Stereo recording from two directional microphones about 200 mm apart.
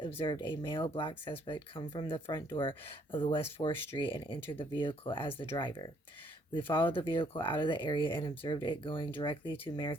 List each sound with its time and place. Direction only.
0.2 s speech: 25° left (ahead or behind)